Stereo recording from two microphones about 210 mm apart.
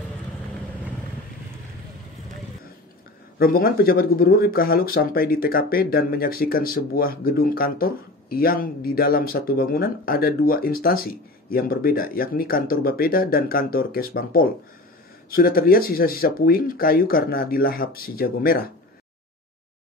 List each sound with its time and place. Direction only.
3.3 s speech: 45° left (ahead or behind)